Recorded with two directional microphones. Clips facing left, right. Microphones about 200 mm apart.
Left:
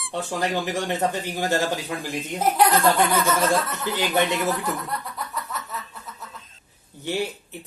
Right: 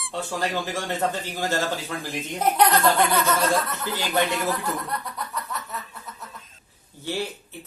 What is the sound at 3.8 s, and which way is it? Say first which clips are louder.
Speech: left 2 dB; 20° left (ahead or behind).